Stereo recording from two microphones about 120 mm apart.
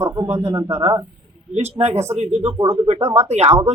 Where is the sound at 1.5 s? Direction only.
65° right (ahead or behind).